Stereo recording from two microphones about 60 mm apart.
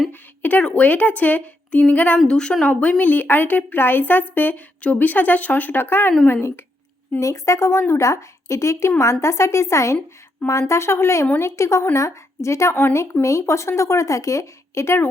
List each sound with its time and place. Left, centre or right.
0.1 s a woman's voice: left
3.0 s speech: left
7.2 s speech: left